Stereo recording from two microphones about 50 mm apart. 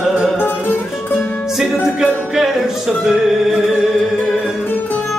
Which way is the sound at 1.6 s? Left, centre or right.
Centre.